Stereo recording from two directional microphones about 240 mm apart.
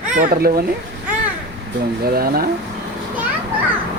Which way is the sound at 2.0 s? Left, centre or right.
Right.